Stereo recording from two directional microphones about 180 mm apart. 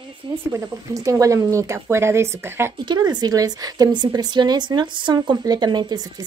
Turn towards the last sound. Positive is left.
turn(degrees=-20)  # may be behind; listen again after turning